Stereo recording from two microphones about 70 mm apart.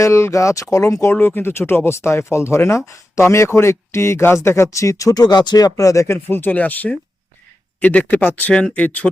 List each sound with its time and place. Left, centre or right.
0.0 s speech: left
1.1 s speech: left
6.2 s speech: left